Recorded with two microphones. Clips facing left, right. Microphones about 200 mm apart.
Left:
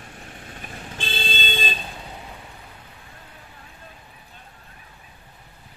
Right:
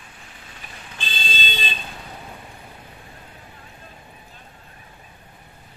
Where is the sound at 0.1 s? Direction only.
50° left (ahead or behind).